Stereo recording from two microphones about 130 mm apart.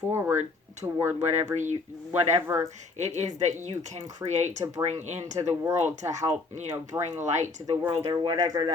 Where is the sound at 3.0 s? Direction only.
65° right (ahead or behind).